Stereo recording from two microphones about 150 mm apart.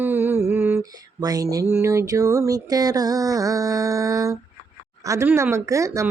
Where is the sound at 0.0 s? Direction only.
15° right (ahead or behind).